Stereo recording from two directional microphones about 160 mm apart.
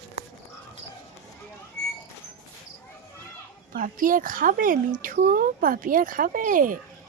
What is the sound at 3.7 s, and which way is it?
Speech, 60° right (ahead or behind).